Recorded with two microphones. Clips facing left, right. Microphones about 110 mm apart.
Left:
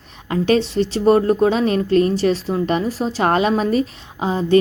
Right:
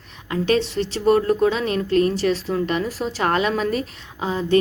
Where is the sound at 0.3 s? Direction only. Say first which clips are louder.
Left 3 dB; 30° left (ahead or behind).